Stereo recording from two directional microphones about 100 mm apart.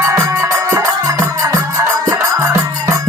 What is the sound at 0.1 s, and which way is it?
Music, 30° right (ahead or behind).